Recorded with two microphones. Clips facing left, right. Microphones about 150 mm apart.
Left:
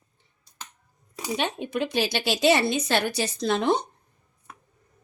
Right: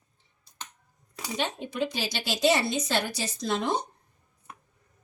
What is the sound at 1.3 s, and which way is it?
A woman's voice, 60° left (ahead or behind).